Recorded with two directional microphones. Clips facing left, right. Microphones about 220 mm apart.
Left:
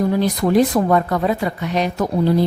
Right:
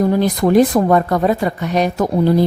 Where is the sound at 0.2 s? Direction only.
50° right (ahead or behind).